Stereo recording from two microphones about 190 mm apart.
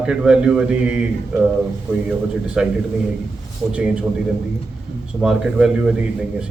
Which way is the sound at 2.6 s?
5° right (ahead or behind).